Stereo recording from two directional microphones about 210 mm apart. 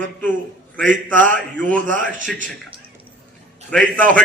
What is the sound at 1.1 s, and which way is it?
Speech, 10° left (ahead or behind).